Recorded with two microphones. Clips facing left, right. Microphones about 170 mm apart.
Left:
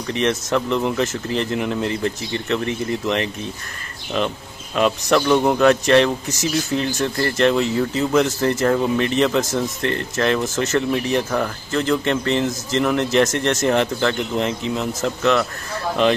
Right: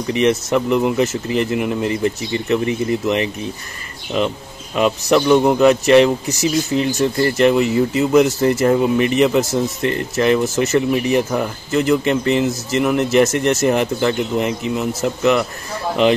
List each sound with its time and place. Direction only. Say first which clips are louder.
0.1 s speech: right 4 dB; 10° right (ahead or behind)